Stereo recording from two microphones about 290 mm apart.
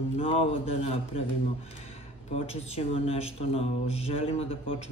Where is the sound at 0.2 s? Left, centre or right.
Centre.